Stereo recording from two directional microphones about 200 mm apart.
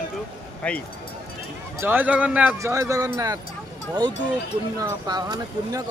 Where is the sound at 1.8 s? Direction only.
10° right (ahead or behind).